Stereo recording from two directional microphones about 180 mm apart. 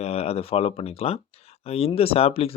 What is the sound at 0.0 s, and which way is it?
Speech, 35° left (ahead or behind).